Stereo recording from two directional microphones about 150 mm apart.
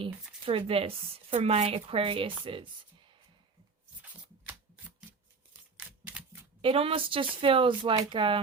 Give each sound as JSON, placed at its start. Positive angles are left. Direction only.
{"t": 0.4, "sound": "speech", "side_deg": -40}
{"t": 5.7, "sound": "typewriter", "side_deg": -10}
{"t": 6.6, "sound": "speech", "side_deg": -40}